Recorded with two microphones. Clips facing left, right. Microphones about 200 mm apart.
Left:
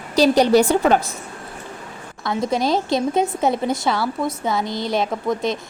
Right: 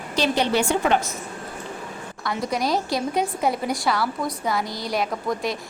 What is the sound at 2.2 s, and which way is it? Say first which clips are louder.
A woman's voice: left 4 dB; 25° left (ahead or behind).